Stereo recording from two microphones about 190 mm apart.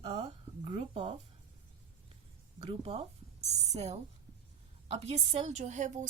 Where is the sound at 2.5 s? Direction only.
30° right (ahead or behind).